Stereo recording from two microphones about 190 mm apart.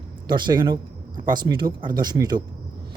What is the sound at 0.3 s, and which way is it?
Speech, 25° right (ahead or behind).